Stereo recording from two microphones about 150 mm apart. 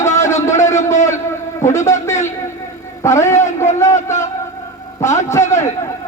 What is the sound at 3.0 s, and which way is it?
Speech, 20° left (ahead or behind).